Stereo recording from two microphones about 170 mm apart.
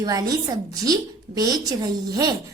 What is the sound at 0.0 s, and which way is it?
A woman's voice, 25° right (ahead or behind).